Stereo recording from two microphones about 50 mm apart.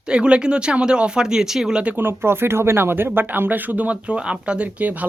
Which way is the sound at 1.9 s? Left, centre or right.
Right.